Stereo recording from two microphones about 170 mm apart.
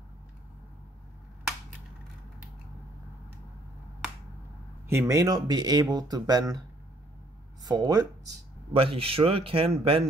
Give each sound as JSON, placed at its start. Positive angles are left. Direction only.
{"t": 4.8, "sound": "speech", "side_deg": -15}
{"t": 7.6, "sound": "speech", "side_deg": -20}
{"t": 8.7, "sound": "a man's voice", "side_deg": -35}